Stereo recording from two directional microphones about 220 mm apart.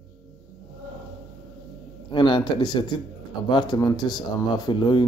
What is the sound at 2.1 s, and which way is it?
Speech, 20° left (ahead or behind).